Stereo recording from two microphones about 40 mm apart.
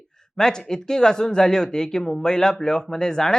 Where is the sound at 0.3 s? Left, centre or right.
Centre.